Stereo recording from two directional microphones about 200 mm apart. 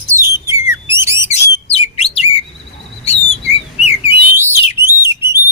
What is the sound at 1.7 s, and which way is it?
Bird, 30° left (ahead or behind).